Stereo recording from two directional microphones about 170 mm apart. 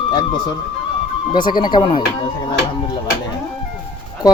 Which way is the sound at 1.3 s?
25° left (ahead or behind).